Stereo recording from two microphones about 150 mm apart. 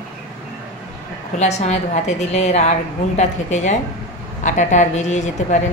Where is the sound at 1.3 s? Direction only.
50° left (ahead or behind).